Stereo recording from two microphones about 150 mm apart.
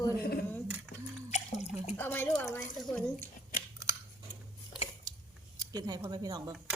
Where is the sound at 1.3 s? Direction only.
50° left (ahead or behind).